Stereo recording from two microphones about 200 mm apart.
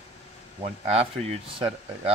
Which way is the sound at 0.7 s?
35° right (ahead or behind).